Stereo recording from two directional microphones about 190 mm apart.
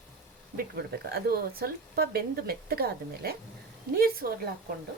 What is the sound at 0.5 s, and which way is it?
Speech, 55° right (ahead or behind).